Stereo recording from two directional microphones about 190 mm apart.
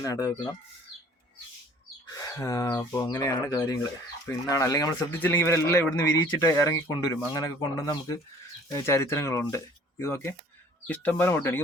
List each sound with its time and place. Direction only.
0.0 s speech: 15° left (ahead or behind)
2.0 s speech: 15° left (ahead or behind)